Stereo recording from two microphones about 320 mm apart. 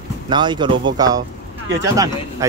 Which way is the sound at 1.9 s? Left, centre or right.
Centre.